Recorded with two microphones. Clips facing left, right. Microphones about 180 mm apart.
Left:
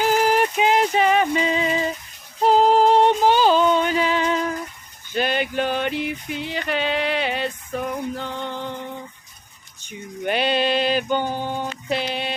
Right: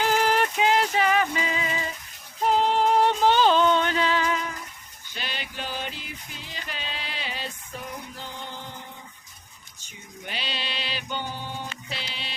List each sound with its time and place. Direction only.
0.0 s music: 10° left (ahead or behind); by 3.0 s 35° left (ahead or behind)
3.0 s music: 15° left (ahead or behind)
5.1 s music: 55° left (ahead or behind)
9.8 s a sound: 60° left (ahead or behind)